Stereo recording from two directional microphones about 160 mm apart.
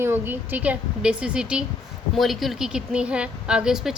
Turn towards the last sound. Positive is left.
turn(degrees=-5)  # may be behind; listen again after turning